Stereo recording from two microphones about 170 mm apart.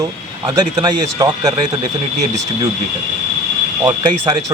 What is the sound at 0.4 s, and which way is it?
Speech, 25° right (ahead or behind).